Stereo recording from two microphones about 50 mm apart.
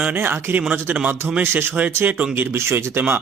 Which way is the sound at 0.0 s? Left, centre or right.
Right.